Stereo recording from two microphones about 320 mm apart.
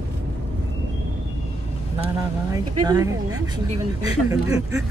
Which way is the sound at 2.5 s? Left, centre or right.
Centre.